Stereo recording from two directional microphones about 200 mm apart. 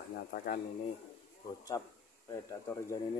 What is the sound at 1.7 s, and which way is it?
A man's voice, 20° left (ahead or behind).